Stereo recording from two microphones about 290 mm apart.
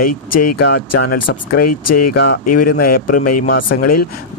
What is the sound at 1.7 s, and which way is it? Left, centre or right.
Speech, left.